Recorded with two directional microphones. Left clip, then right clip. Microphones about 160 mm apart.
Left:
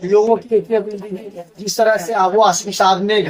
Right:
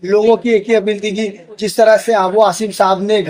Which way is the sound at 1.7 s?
75° right (ahead or behind).